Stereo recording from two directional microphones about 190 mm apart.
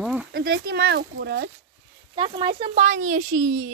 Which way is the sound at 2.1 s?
25° right (ahead or behind).